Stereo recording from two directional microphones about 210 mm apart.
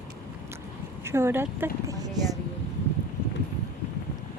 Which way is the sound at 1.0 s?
10° right (ahead or behind).